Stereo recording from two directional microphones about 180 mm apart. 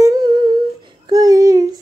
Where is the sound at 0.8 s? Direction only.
20° right (ahead or behind).